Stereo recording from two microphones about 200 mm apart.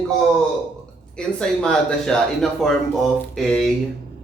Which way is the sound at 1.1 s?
5° left (ahead or behind).